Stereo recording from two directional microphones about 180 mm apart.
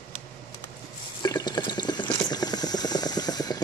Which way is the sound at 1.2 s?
20° left (ahead or behind).